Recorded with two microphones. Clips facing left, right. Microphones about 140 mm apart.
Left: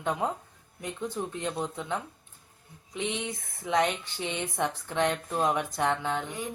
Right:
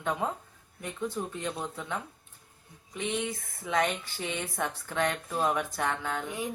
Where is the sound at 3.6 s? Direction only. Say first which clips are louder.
Left 2 dB; 15° left (ahead or behind).